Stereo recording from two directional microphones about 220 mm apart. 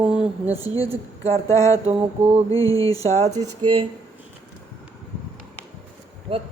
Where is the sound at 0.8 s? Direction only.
30° right (ahead or behind).